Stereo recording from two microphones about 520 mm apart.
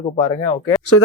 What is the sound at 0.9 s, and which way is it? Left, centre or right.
Speech, left.